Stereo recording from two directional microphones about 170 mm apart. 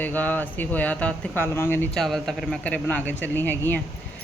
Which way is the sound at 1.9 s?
Centre (ahead or behind).